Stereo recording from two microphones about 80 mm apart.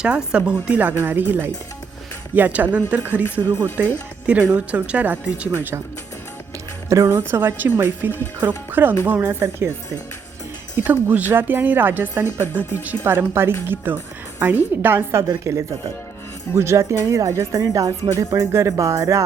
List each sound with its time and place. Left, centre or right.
0.0 s speech: centre
6.8 s speech: right
10.8 s speech: right
15.3 s speech: right